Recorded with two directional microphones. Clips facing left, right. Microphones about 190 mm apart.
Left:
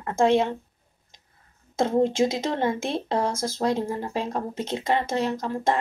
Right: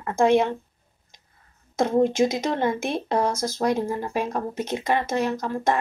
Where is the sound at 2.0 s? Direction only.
25° left (ahead or behind).